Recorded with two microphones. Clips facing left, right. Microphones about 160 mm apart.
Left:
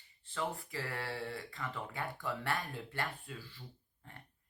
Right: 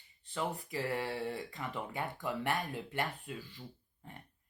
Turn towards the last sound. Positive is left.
turn(degrees=-15)  # may be behind; listen again after turning